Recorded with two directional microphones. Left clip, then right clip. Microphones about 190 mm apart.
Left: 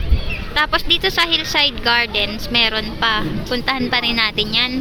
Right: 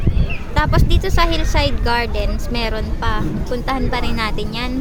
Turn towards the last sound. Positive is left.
turn(degrees=0)  # may be behind; listen again after turning